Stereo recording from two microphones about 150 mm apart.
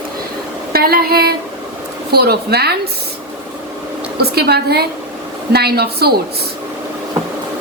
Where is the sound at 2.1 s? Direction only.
90° right.